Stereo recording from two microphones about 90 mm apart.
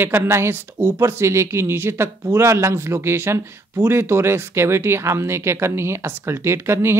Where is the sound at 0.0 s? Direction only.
25° right (ahead or behind).